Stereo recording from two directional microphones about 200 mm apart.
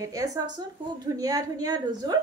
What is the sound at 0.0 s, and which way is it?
A woman's voice, 15° right (ahead or behind).